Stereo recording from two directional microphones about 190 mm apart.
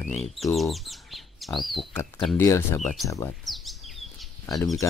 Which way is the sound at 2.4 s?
15° left (ahead or behind).